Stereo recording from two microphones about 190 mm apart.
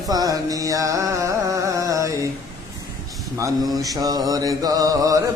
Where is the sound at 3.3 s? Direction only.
20° right (ahead or behind).